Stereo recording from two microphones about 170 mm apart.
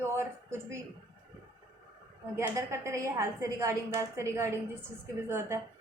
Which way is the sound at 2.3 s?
15° right (ahead or behind).